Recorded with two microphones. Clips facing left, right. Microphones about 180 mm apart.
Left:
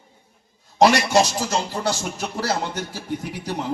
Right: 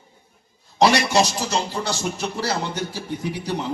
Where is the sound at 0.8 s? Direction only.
50° left (ahead or behind).